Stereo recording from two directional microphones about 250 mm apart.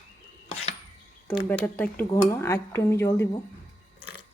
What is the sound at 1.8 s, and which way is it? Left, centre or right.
Speech, centre.